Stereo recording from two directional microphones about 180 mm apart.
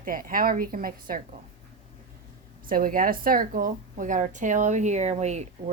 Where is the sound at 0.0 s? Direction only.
50° right (ahead or behind).